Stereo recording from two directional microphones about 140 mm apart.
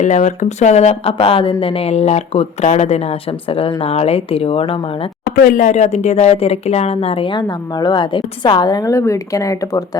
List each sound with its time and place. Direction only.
0.0 s speech: 60° left (ahead or behind); by 4.8 s 40° left (ahead or behind)
5.3 s speech: 90° left; by 10.0 s 25° left (ahead or behind)